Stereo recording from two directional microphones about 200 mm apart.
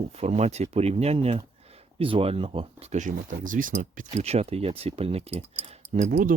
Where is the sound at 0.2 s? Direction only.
30° right (ahead or behind).